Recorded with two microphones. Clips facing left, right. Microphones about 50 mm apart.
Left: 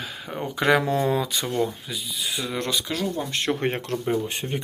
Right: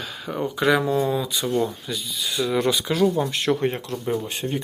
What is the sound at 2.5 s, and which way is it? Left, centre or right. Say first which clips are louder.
Speech: right 7 dB; centre.